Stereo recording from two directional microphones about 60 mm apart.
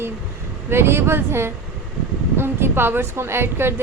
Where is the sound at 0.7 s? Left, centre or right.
Right.